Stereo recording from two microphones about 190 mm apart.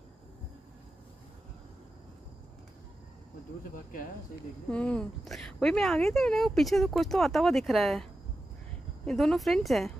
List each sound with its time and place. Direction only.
3.7 s speech: 45° left (ahead or behind)
4.6 s a woman's voice: 5° left (ahead or behind)